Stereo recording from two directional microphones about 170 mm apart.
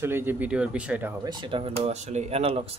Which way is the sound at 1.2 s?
30° right (ahead or behind).